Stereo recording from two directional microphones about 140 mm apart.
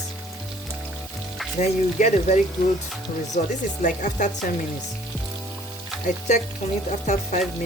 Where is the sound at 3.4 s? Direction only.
90° left.